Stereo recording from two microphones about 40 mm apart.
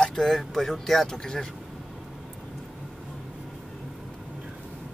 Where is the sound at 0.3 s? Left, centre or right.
Centre.